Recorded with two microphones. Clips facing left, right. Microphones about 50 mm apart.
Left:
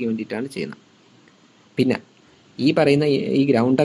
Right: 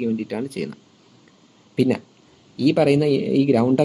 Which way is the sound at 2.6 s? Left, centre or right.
Centre.